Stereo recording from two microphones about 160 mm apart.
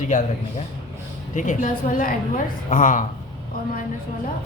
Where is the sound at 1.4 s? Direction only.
55° left (ahead or behind).